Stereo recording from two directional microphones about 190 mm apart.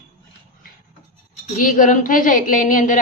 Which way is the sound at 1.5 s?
45° left (ahead or behind).